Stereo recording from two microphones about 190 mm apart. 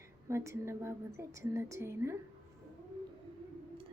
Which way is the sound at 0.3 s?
15° right (ahead or behind).